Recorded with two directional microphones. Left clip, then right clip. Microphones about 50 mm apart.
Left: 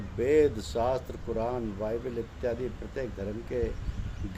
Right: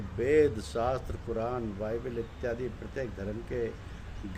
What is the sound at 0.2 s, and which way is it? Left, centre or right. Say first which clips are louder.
Speech: left 1 dB; right.